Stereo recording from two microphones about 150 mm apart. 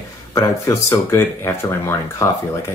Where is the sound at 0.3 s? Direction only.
20° left (ahead or behind).